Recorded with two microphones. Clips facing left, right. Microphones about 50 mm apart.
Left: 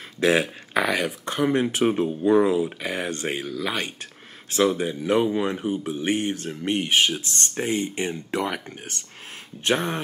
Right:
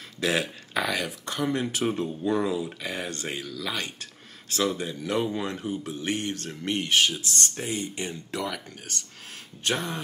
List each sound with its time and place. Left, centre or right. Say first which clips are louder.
0.2 s speech: left 6 dB; left